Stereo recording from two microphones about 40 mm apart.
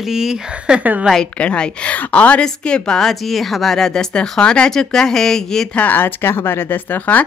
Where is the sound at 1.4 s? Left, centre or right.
Left.